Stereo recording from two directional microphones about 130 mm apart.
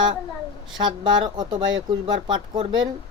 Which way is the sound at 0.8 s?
35° right (ahead or behind).